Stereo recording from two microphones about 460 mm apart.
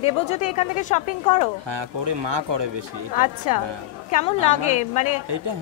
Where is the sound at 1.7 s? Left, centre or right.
Right.